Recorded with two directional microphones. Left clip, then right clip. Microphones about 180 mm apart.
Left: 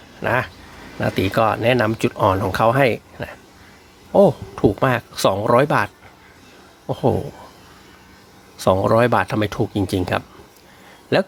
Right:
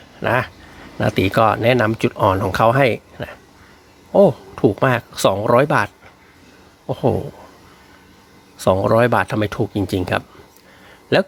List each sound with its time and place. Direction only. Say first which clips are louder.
0.2 s speech: right 2 dB; 15° right (ahead or behind)
8.5 s speech: right 1 dB; 5° right (ahead or behind)